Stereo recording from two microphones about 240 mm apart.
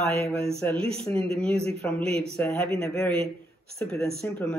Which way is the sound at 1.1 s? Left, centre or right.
Right.